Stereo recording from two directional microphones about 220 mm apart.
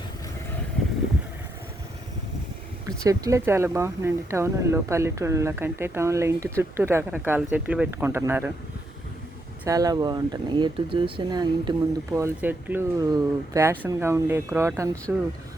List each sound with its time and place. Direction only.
3.0 s speech: 15° right (ahead or behind)
9.6 s speech: 15° right (ahead or behind)